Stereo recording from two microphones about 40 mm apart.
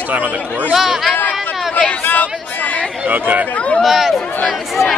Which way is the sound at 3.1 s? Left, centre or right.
Right.